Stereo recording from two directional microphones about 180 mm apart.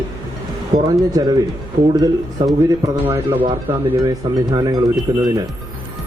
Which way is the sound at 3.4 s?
25° right (ahead or behind).